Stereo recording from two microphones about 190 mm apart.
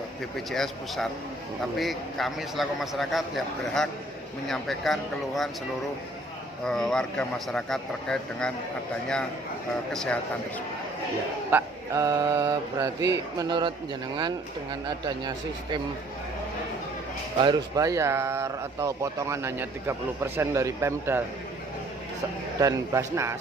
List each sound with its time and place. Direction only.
0.2 s a man's voice: centre (ahead or behind)
6.7 s a man's voice: centre (ahead or behind)
9.9 s a man's voice: centre (ahead or behind)
11.5 s speech: 15° right (ahead or behind)
17.4 s speech: 20° right (ahead or behind)
22.6 s speech: 15° right (ahead or behind)